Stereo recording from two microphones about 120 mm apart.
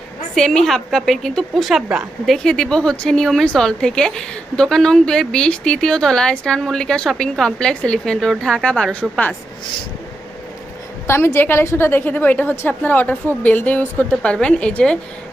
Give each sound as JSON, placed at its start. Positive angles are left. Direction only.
{"t": 0.3, "sound": "a woman's voice", "side_deg": 5}
{"t": 11.0, "sound": "a woman's voice", "side_deg": 20}